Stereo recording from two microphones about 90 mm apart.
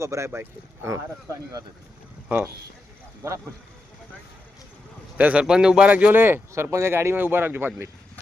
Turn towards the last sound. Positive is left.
turn(degrees=-25)  # may be behind; listen again after turning